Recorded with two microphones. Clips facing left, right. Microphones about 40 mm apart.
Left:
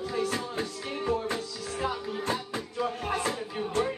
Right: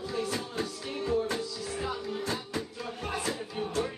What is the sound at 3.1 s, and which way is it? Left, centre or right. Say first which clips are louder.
Music: even; left.